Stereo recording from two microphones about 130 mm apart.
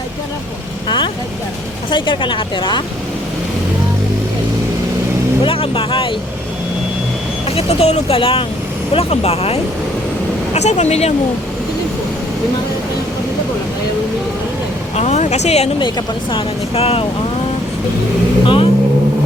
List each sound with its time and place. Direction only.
0.9 s speech: 40° left (ahead or behind)
5.4 s speech: 45° left (ahead or behind)
7.5 s speech: 50° left (ahead or behind)
14.9 s speech: 60° left (ahead or behind)
15.8 s speech: 40° left (ahead or behind)
18.4 s speech: 40° left (ahead or behind)